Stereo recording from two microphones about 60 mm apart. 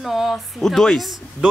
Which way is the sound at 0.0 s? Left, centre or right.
Centre.